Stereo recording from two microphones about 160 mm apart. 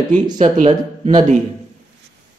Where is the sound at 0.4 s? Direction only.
45° right (ahead or behind).